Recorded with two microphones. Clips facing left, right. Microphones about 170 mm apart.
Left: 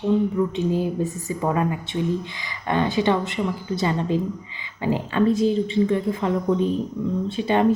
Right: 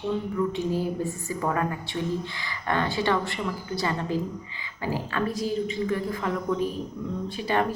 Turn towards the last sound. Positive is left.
turn(degrees=20)  # may be behind; listen again after turning